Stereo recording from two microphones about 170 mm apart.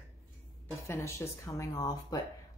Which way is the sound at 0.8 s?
15° left (ahead or behind).